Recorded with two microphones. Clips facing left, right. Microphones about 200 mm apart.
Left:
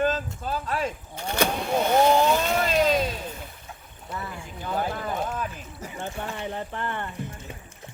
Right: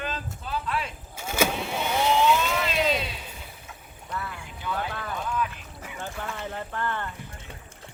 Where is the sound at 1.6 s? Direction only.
50° left (ahead or behind).